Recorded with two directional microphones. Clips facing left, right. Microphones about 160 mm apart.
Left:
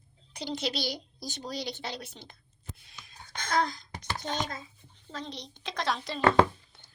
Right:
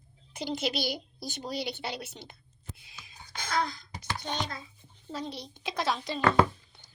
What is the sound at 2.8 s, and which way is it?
Whispering, 5° right (ahead or behind).